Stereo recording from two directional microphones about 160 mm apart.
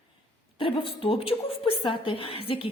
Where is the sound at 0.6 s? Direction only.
35° left (ahead or behind).